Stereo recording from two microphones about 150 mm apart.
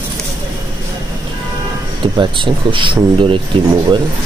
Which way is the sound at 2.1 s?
30° right (ahead or behind).